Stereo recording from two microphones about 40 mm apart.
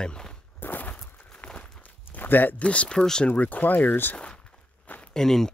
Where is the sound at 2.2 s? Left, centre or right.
Left.